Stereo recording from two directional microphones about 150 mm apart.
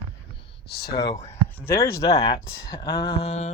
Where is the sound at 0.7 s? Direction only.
90° left.